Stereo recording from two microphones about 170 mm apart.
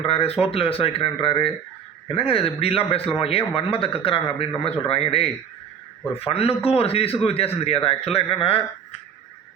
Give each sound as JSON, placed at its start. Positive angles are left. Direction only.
{"t": 0.0, "sound": "speech", "side_deg": 35}